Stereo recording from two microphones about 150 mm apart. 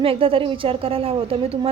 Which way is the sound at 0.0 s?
40° right (ahead or behind).